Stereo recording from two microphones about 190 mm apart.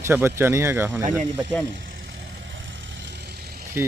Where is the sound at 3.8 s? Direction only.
10° right (ahead or behind).